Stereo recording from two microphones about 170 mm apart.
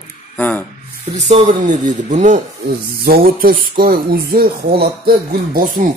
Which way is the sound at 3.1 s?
60° right (ahead or behind).